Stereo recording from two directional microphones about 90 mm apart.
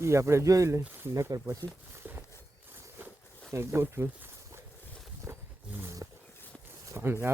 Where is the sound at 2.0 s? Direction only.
20° right (ahead or behind).